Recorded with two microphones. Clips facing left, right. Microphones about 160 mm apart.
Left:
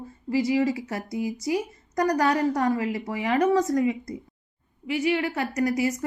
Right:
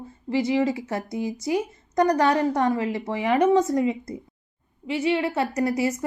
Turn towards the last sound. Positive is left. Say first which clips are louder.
# right 1 dB
turn(degrees=-25)  # may be behind; listen again after turning